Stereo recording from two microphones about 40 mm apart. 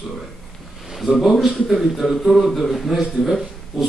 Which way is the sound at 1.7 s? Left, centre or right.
Centre.